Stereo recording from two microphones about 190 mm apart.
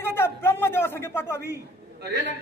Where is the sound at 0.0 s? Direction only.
10° left (ahead or behind).